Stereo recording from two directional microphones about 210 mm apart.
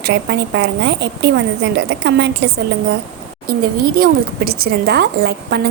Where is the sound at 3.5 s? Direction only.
45° right (ahead or behind).